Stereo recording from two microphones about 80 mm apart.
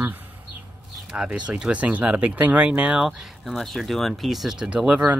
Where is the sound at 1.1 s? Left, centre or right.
Centre.